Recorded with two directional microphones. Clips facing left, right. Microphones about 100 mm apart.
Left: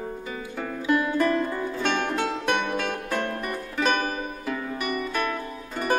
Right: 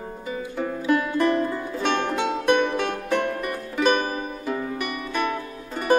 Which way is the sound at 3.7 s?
15° right (ahead or behind).